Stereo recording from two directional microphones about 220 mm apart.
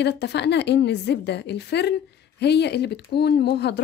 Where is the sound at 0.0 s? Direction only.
50° left (ahead or behind).